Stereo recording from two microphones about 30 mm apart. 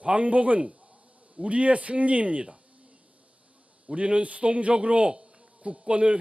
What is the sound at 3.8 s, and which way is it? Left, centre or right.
A man's voice, right.